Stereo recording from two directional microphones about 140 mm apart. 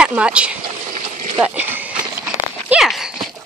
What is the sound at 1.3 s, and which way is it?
Dog, 10° right (ahead or behind).